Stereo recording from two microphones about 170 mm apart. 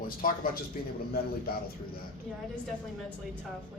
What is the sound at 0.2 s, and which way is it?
Speech, 60° left (ahead or behind).